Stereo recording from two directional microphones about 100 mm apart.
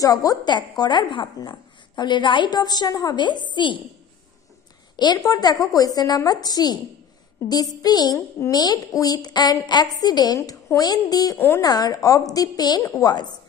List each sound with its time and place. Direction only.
0.0 s a woman's voice: 35° left (ahead or behind)
4.9 s a woman's voice: 45° left (ahead or behind)
11.3 s speech: 25° left (ahead or behind)
11.6 s a woman's voice: 40° left (ahead or behind)